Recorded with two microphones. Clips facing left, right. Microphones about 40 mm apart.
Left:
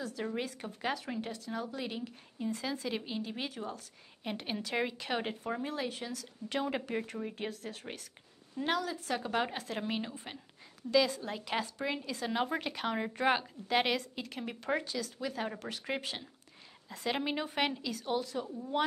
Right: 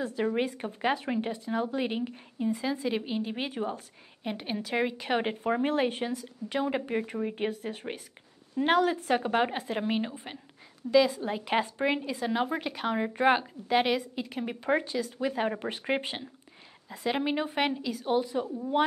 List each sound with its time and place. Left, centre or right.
0.0 s a woman's voice: right
2.3 s a woman's voice: centre
4.2 s a woman's voice: centre; by 6.1 s right
6.1 s a woman's voice: centre
8.6 s speech: right
9.3 s a woman's voice: right
12.2 s a woman's voice: centre; by 16.3 s right
16.9 s a woman's voice: centre